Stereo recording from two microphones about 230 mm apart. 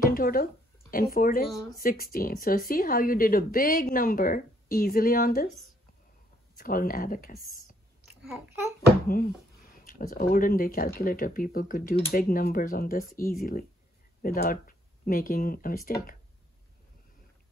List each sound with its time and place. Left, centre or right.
0.0 s a sound: left
1.1 s speech: left
6.5 s speech: left
8.2 s a child's voice: centre
9.0 s speech: left